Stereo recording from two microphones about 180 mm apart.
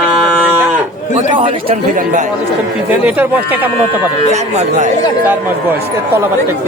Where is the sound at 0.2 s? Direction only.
5° right (ahead or behind).